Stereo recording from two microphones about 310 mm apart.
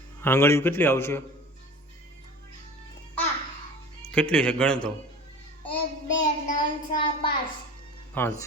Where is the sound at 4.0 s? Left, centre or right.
Centre.